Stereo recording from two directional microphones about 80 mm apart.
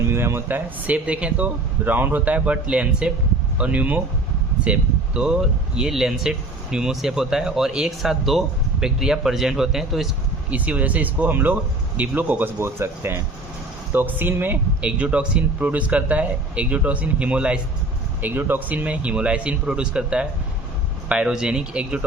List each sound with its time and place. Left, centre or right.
0.1 s speech: right; by 10.1 s centre
10.5 s speech: centre
14.8 s speech: centre
18.2 s speech: right